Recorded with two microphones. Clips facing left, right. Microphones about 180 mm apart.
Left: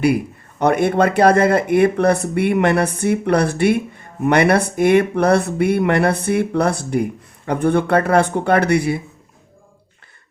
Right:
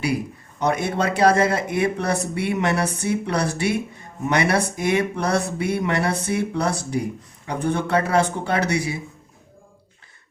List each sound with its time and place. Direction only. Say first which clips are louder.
0.6 s speech: left 7 dB; 60° left (ahead or behind)